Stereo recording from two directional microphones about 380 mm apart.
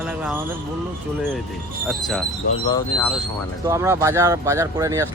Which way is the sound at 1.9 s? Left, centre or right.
Centre.